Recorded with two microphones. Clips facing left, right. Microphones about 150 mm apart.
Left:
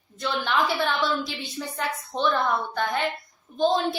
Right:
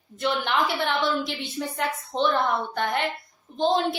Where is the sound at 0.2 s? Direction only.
20° right (ahead or behind).